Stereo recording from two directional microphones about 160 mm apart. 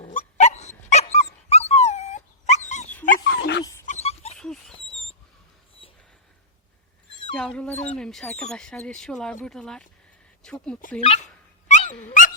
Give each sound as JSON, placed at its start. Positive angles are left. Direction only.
{"t": 0.1, "sound": "dog", "side_deg": 50}
{"t": 3.2, "sound": "dog", "side_deg": 90}
{"t": 3.8, "sound": "dog", "side_deg": 40}
{"t": 4.4, "sound": "dog", "side_deg": 5}
{"t": 5.8, "sound": "a sound", "side_deg": 35}
{"t": 7.3, "sound": "speech", "side_deg": 5}
{"t": 11.0, "sound": "speech", "side_deg": 40}
{"t": 11.7, "sound": "dog", "side_deg": 50}